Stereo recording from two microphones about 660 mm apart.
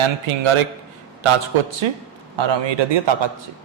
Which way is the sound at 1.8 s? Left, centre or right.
Right.